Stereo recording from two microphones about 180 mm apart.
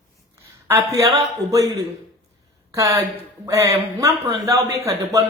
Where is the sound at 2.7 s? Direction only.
15° right (ahead or behind).